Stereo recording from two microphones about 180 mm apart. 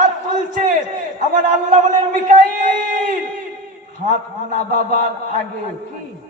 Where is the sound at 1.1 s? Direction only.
45° right (ahead or behind).